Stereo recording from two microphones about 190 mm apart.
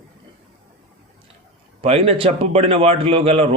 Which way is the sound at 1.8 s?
30° right (ahead or behind).